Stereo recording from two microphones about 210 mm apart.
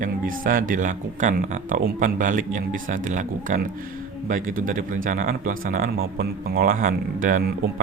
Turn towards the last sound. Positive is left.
turn(degrees=-40)  # may be behind; listen again after turning